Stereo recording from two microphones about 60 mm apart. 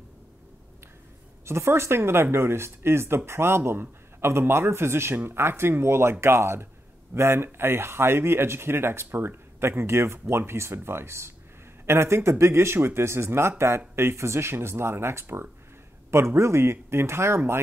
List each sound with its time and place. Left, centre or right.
1.4 s speech: right